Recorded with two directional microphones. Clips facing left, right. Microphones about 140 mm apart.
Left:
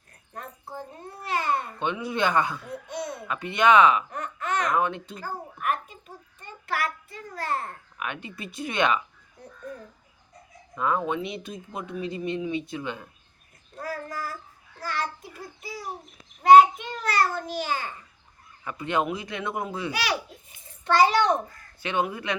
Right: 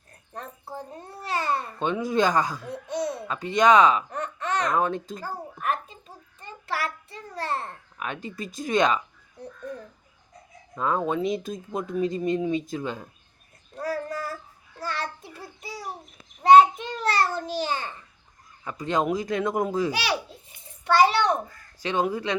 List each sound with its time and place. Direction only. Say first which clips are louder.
1.2 s babbling: even; 30° right (ahead or behind)
4.9 s a child's voice: right 3 dB; 40° right (ahead or behind)
5.6 s child singing: even; 30° right (ahead or behind)
10.8 s speech: even; 30° right (ahead or behind)
11.1 s speech: right 4 dB; 40° right (ahead or behind)
13.9 s child singing: right 3 dB; 25° right (ahead or behind)
14.8 s a sound: even; 30° right (ahead or behind)
17.0 s babbling: right 1 dB; 30° right (ahead or behind)
18.6 s speech: right 1 dB; 30° right (ahead or behind)
20.8 s a sound: even; centre (ahead or behind)
21.8 s speech: right 2 dB; 35° right (ahead or behind)